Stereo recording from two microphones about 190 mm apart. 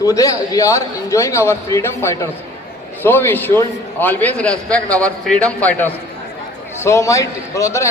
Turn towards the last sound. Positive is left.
turn(degrees=15)  # may be behind; listen again after turning